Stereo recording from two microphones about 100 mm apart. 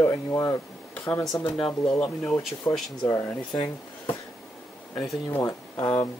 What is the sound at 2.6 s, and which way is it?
Speech, 25° left (ahead or behind).